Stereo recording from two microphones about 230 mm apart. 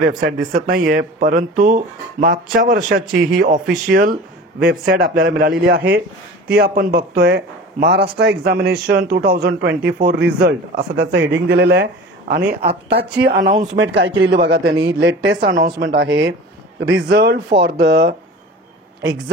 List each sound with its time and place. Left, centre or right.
0.0 s a man's voice: right